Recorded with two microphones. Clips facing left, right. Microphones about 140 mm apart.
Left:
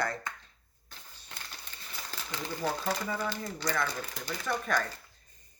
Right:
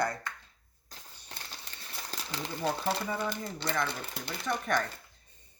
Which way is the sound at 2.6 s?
25° right (ahead or behind).